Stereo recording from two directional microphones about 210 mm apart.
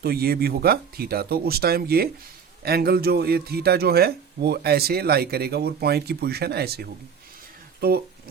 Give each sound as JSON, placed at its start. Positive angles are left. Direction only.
{"t": 0.0, "sound": "speech", "side_deg": -50}